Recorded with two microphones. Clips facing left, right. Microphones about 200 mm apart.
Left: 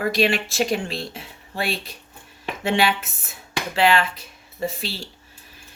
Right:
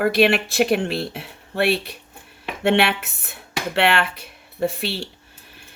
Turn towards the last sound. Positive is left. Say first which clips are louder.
# right 5 dB
turn(degrees=-65)  # may be behind; listen again after turning